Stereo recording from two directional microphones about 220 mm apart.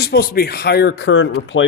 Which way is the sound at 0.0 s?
45° left (ahead or behind).